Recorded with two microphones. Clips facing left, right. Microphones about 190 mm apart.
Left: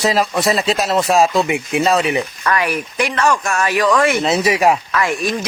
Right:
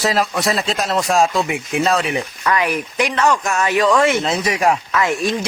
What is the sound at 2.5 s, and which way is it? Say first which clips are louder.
Speech: right 2 dB; 15° right (ahead or behind).